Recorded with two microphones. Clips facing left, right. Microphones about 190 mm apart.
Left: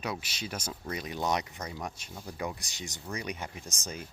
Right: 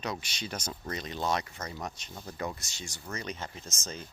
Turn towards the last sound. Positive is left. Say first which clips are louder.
# left 1 dB
turn(degrees=10)  # may be behind; listen again after turning